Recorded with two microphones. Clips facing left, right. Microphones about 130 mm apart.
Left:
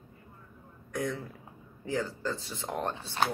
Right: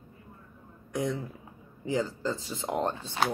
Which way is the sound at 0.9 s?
20° right (ahead or behind).